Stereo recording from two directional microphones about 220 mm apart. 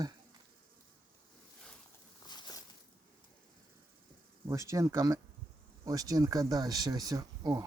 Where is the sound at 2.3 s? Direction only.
20° left (ahead or behind).